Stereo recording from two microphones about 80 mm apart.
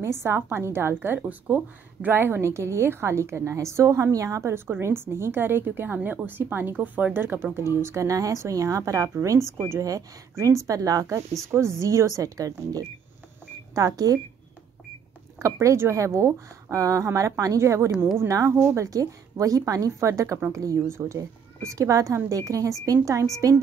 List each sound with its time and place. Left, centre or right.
0.0 s a woman's voice: right
15.3 s a woman's voice: right